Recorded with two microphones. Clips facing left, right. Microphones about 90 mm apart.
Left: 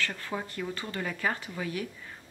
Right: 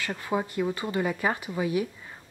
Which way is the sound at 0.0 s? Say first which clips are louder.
Right 5 dB; 15° right (ahead or behind).